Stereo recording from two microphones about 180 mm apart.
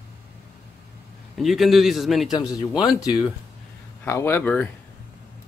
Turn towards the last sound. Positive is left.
turn(degrees=10)  # may be behind; listen again after turning